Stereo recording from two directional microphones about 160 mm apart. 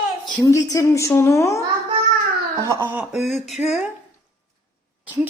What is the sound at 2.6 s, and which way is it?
Speech, 15° right (ahead or behind).